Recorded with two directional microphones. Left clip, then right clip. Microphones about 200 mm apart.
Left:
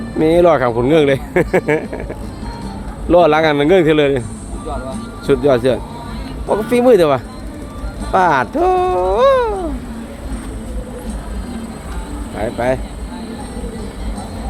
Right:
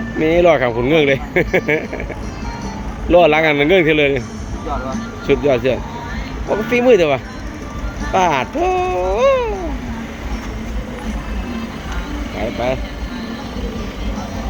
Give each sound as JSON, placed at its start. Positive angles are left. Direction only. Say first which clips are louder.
{"t": 0.2, "sound": "speech", "louder": "left 1 dB", "side_deg": 25}
{"t": 3.1, "sound": "speech", "louder": "even", "side_deg": 20}
{"t": 5.2, "sound": "speech", "louder": "left 2 dB", "side_deg": 25}